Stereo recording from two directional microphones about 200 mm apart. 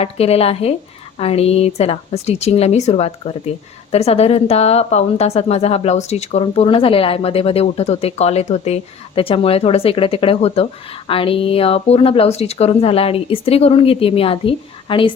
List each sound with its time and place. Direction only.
0.0 s a woman's voice: 30° left (ahead or behind)